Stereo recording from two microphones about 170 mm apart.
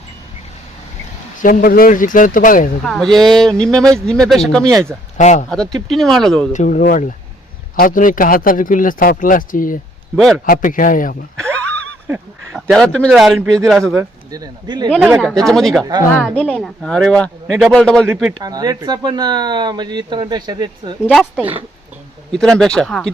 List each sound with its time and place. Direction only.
1.4 s a man's voice: 50° left (ahead or behind)
2.8 s speech: centre (ahead or behind)
5.1 s a man's voice: 45° left (ahead or behind)
5.9 s speech: centre (ahead or behind)
6.5 s a man's voice: 45° left (ahead or behind)
12.5 s speech: centre (ahead or behind)
13.9 s speech: 20° right (ahead or behind)
15.2 s speech: 5° left (ahead or behind)
15.8 s speech: 25° right (ahead or behind)
16.1 s a woman's voice: 5° left (ahead or behind)
18.3 s speech: 25° right (ahead or behind)
21.1 s speech: centre (ahead or behind)